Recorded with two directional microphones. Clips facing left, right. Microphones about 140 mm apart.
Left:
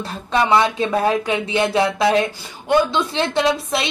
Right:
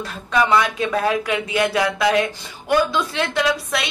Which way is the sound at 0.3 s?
30° left (ahead or behind).